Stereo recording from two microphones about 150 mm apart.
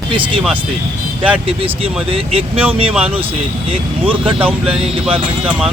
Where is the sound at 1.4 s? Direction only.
40° right (ahead or behind).